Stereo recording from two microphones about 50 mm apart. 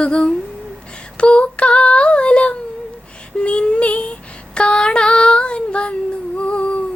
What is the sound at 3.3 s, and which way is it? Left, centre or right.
Child singing, left.